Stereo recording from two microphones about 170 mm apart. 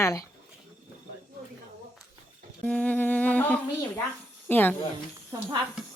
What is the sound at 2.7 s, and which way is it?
Speech, 10° left (ahead or behind).